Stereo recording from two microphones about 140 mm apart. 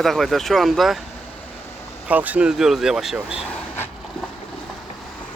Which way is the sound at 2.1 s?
10° right (ahead or behind).